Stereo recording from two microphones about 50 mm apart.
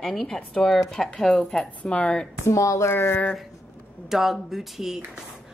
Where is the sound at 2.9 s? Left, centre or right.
Left.